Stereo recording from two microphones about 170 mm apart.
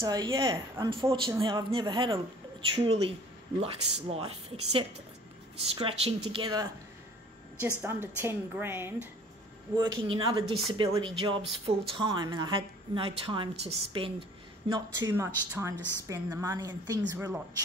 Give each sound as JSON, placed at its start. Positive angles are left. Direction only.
{"t": 0.0, "sound": "a woman's voice", "side_deg": -25}
{"t": 7.6, "sound": "a woman's voice", "side_deg": -15}
{"t": 9.8, "sound": "a woman's voice", "side_deg": -30}
{"t": 14.7, "sound": "a woman's voice", "side_deg": -20}